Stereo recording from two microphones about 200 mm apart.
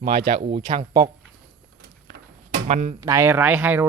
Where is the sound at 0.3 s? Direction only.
30° right (ahead or behind).